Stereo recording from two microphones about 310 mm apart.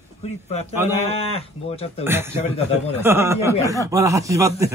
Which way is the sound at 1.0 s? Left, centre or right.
Centre.